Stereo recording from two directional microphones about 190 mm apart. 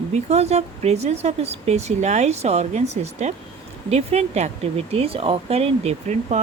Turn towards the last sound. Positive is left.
turn(degrees=-35)  # may be behind; listen again after turning